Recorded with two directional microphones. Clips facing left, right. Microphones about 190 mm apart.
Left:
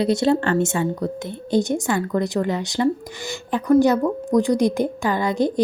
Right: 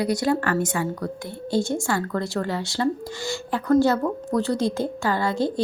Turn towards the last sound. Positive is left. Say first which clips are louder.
# left 3 dB
turn(degrees=15)  # may be behind; listen again after turning